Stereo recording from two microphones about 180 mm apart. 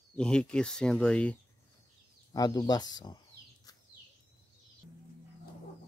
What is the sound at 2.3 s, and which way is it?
Speech, 20° left (ahead or behind).